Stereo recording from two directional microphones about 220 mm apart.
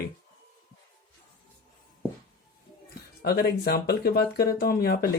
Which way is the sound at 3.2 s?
45° left (ahead or behind).